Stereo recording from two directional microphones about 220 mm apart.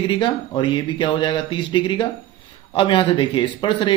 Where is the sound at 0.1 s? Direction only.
20° left (ahead or behind).